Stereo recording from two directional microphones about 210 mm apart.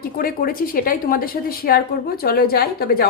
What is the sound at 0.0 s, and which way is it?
A woman's voice, 45° left (ahead or behind).